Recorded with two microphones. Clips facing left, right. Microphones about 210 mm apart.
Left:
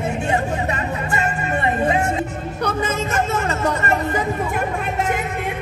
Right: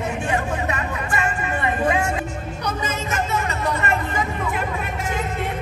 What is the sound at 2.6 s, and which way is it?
Music, 55° left (ahead or behind).